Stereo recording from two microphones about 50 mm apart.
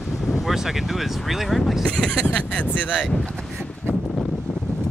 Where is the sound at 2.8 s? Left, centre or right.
Right.